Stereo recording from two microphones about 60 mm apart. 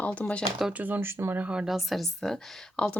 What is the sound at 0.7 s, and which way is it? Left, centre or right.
Speech, right.